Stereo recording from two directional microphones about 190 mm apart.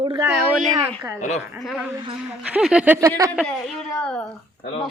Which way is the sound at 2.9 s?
15° right (ahead or behind).